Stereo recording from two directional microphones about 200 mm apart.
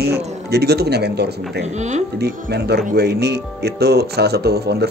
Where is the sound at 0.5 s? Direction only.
55° right (ahead or behind).